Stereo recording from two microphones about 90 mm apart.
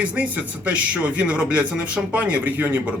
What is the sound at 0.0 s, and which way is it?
Speech, 15° right (ahead or behind).